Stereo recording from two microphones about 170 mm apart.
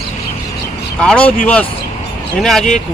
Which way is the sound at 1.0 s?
5° left (ahead or behind).